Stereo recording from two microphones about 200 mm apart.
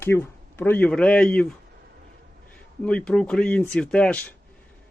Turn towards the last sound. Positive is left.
turn(degrees=5)  # may be behind; listen again after turning